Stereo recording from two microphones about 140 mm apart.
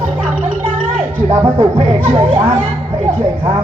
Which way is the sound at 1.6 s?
45° right (ahead or behind).